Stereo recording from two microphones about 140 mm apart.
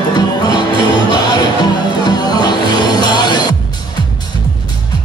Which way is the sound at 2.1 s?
30° left (ahead or behind).